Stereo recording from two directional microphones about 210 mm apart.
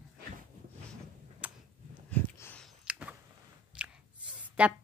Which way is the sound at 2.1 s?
10° left (ahead or behind).